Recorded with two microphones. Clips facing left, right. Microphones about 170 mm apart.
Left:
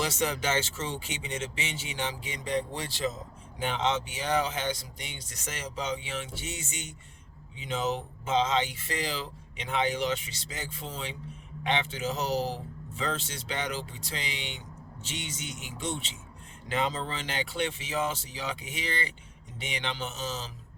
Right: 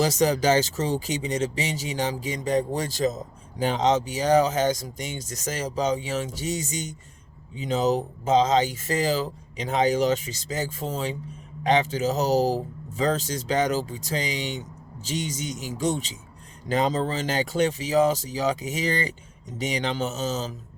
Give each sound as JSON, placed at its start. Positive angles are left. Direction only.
{"t": 0.0, "sound": "speech", "side_deg": -40}